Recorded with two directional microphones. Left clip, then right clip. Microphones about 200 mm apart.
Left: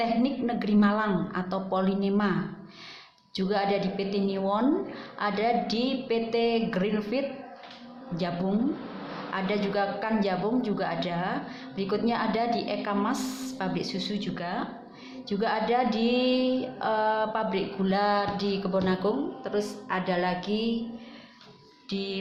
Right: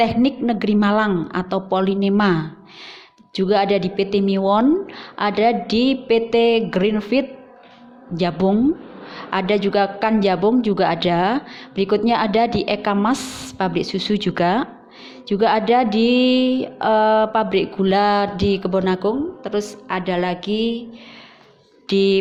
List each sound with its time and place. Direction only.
0.0 s speech: 35° right (ahead or behind)
15.3 s speech: 40° right (ahead or behind)
21.8 s speech: 45° right (ahead or behind)